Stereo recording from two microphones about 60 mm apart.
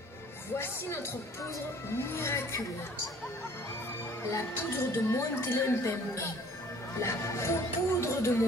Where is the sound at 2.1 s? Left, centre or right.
Left.